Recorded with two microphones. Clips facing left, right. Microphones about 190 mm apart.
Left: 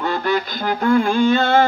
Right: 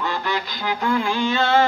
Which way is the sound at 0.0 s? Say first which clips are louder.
Left 5 dB; 50° left (ahead or behind).